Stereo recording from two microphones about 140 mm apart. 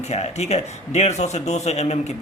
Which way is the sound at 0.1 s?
50° left (ahead or behind).